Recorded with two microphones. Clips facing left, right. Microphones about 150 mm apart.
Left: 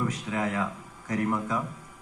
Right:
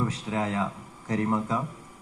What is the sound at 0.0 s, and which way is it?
A man's voice, 25° right (ahead or behind).